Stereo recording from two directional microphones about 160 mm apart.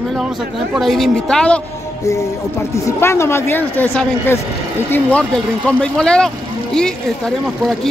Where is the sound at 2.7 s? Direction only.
15° left (ahead or behind).